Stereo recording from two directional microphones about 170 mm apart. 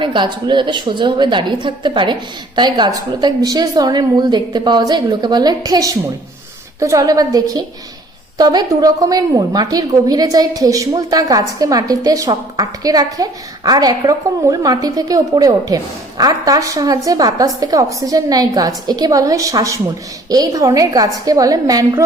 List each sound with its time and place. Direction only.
0.0 s a woman's voice: 30° right (ahead or behind)